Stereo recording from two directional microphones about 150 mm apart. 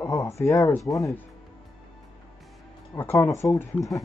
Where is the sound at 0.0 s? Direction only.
20° left (ahead or behind).